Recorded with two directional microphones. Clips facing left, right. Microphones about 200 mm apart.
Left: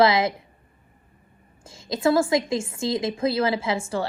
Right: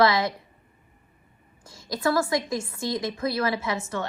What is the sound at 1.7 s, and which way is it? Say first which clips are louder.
A woman's voice: left 4 dB; 25° left (ahead or behind).